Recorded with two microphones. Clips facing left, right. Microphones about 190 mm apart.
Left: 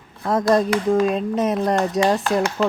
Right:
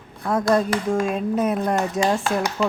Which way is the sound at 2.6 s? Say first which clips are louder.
Left 1 dB; centre (ahead or behind).